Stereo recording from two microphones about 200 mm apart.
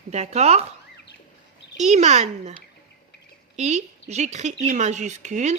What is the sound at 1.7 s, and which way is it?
Speech, 35° right (ahead or behind).